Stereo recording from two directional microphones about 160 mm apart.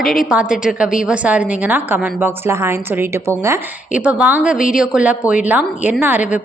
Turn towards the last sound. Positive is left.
turn(degrees=-10)  # may be behind; listen again after turning